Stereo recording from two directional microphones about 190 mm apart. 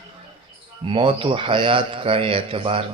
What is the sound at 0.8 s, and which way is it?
A man's voice, 30° right (ahead or behind).